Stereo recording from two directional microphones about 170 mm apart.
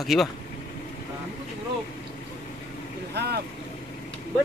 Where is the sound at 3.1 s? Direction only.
70° right (ahead or behind).